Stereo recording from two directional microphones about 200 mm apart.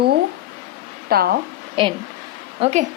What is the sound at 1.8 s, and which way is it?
Speech, 25° right (ahead or behind).